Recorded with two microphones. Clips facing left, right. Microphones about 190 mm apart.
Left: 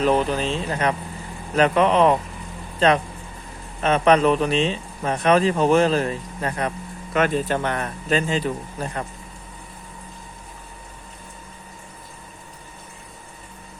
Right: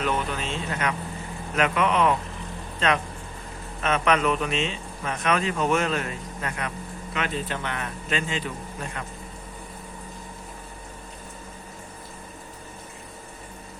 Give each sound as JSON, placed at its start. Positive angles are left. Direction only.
{"t": 0.0, "sound": "speech", "side_deg": 35}
{"t": 7.1, "sound": "speech", "side_deg": 45}